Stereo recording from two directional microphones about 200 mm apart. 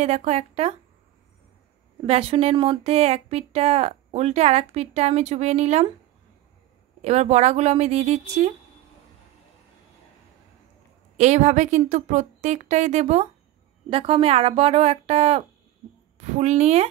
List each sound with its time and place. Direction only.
0.0 s speech: 35° right (ahead or behind)
2.0 s speech: 30° right (ahead or behind)
7.0 s speech: 35° right (ahead or behind)
11.1 s speech: 35° right (ahead or behind)